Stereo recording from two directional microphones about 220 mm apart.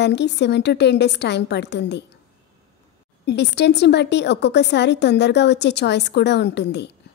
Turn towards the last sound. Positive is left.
turn(degrees=50)  # may be behind; listen again after turning